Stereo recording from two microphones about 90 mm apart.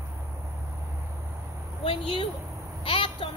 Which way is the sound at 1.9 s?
90° left.